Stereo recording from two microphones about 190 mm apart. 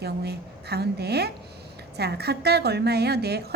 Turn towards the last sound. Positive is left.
turn(degrees=-55)  # may be behind; listen again after turning